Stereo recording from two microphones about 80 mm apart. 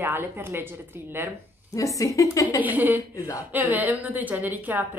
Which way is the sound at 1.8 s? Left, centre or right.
Left.